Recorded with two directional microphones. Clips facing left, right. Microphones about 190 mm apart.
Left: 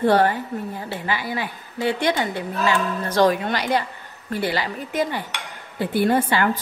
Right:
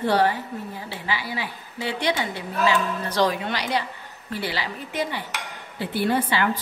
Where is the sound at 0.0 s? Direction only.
50° left (ahead or behind).